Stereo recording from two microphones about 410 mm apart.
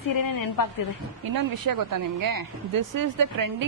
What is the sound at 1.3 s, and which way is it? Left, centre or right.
Speech, right.